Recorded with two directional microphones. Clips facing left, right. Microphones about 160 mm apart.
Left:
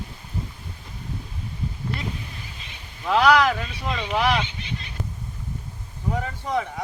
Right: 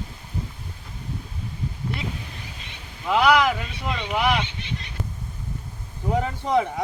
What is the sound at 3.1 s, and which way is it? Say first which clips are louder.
Speech: left 1 dB; 15° right (ahead or behind).